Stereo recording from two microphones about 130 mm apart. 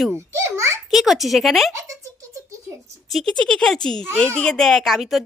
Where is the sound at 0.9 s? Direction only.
Centre (ahead or behind).